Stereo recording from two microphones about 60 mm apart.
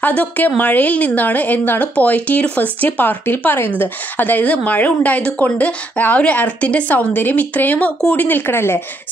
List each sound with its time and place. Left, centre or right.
0.0 s speech: left